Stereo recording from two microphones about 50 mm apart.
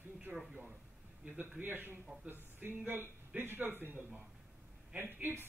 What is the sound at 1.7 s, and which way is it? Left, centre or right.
A man's voice, right.